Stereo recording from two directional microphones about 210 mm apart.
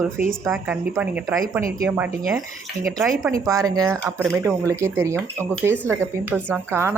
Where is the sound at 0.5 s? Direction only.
5° right (ahead or behind).